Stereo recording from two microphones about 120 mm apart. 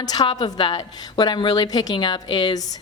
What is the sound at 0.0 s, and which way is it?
A woman's voice, 30° left (ahead or behind).